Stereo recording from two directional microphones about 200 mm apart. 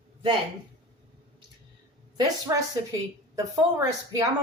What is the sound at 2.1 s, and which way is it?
A woman's voice, 20° right (ahead or behind).